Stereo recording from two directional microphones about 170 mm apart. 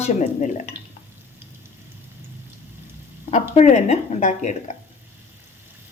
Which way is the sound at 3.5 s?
40° left (ahead or behind).